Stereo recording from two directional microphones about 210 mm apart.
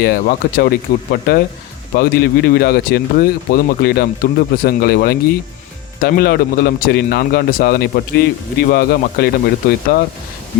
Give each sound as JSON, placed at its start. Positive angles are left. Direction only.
{"t": 0.0, "sound": "a man's voice", "side_deg": 45}